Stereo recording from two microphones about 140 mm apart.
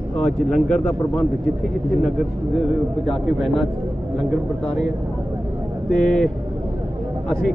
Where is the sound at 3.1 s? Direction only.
Centre (ahead or behind).